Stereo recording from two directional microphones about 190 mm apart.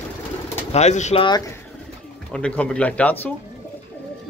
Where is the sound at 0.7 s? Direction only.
35° left (ahead or behind).